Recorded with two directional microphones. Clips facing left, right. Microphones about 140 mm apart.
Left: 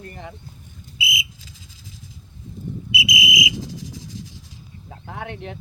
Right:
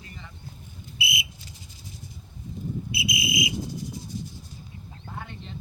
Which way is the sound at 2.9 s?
90° left.